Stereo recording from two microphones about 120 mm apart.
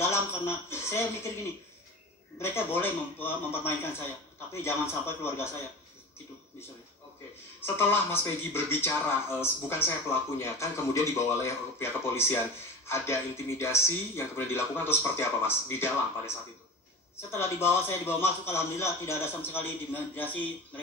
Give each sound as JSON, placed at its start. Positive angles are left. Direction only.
{"t": 0.7, "sound": "speech", "side_deg": 20}
{"t": 2.3, "sound": "speech", "side_deg": 20}
{"t": 7.6, "sound": "speech", "side_deg": 15}